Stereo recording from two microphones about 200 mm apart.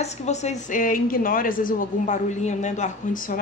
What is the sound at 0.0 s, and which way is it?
A woman's voice, 35° left (ahead or behind).